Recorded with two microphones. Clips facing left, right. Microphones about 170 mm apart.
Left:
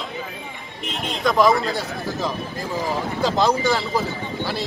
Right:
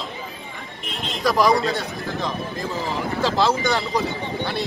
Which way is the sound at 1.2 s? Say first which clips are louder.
Left 1 dB; centre (ahead or behind).